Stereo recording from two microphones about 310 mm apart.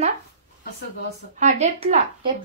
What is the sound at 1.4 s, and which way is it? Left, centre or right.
Speech, right.